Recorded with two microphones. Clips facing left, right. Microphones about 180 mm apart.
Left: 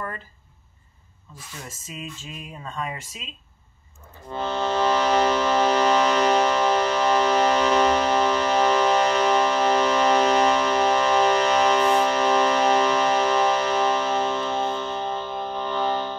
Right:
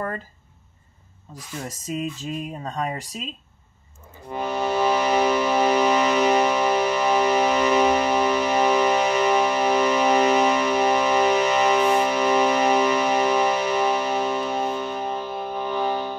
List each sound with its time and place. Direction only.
1.3 s speech: 40° right (ahead or behind)
4.3 s music: 15° right (ahead or behind)